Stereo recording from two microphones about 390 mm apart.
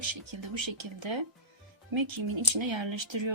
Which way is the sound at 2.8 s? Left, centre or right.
Right.